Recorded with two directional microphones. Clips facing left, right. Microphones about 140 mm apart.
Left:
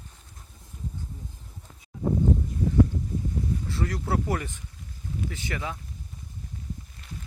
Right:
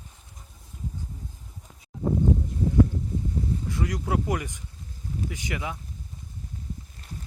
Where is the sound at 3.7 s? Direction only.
15° right (ahead or behind).